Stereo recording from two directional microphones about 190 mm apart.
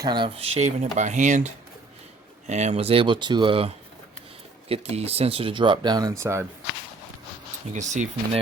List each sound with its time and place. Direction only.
0.0 s speech: 25° right (ahead or behind); by 1.5 s 40° right (ahead or behind)
2.5 s speech: 35° right (ahead or behind)
4.7 s speech: 30° right (ahead or behind); by 6.4 s 15° right (ahead or behind)
7.7 s speech: 40° right (ahead or behind)